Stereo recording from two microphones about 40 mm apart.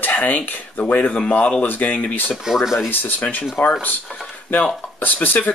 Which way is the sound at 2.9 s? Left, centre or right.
Left.